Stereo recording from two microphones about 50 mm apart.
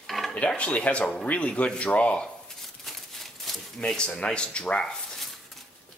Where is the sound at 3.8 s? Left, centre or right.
Centre.